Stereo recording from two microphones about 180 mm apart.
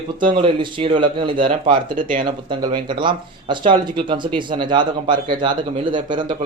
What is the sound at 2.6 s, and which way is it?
Speech, 25° right (ahead or behind).